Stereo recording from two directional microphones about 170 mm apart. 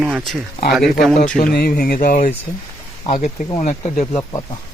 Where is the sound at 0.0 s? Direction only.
5° right (ahead or behind).